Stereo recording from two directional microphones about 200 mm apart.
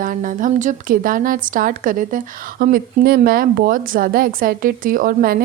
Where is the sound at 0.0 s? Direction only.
40° right (ahead or behind).